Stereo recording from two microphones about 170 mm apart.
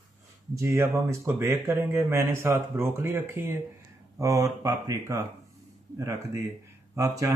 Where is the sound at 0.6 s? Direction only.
15° right (ahead or behind).